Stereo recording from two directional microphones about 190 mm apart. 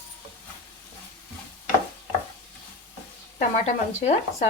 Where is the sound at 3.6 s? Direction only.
35° left (ahead or behind).